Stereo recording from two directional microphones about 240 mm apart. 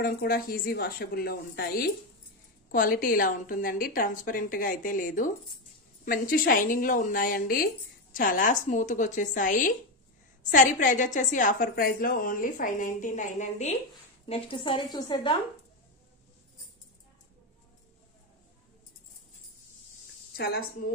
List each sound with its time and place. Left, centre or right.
0.0 s a woman's voice: left; by 15.3 s centre
20.3 s a woman's voice: left